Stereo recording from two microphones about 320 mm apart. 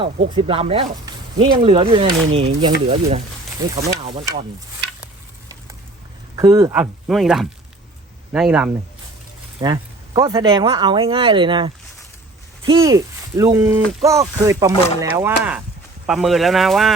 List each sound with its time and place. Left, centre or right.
0.0 s speech: centre
6.3 s speech: centre
9.6 s speech: centre